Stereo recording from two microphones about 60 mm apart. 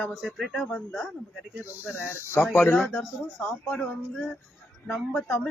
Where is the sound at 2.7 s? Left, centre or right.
Centre.